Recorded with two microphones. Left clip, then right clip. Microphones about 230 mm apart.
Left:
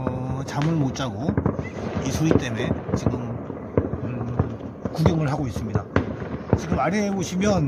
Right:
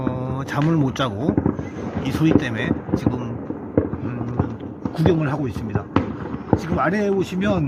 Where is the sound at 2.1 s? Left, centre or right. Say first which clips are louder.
Right 4 dB; centre.